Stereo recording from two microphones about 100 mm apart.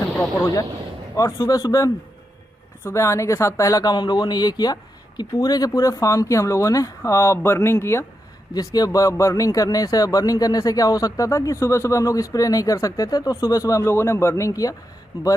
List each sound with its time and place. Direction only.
1.1 s a man's voice: 35° left (ahead or behind)
8.5 s a man's voice: 40° left (ahead or behind)